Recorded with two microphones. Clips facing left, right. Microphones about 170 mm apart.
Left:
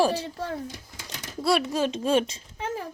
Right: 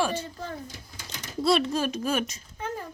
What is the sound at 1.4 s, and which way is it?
Speech, 10° left (ahead or behind).